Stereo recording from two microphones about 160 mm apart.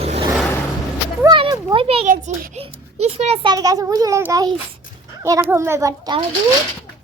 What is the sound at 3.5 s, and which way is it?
A child's voice, 25° right (ahead or behind).